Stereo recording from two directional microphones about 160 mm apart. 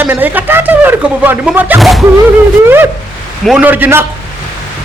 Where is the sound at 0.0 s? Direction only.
10° right (ahead or behind).